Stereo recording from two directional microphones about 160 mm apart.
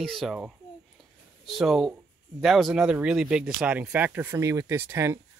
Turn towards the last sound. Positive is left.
turn(degrees=-15)  # may be behind; listen again after turning